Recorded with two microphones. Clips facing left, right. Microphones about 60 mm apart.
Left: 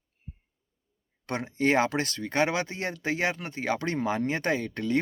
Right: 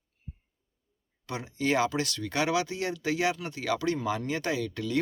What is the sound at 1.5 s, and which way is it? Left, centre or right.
Speech, left.